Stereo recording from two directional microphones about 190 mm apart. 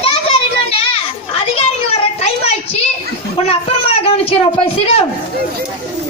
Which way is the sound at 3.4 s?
30° left (ahead or behind).